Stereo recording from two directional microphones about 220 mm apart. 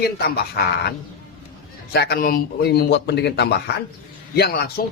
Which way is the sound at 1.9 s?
45° left (ahead or behind).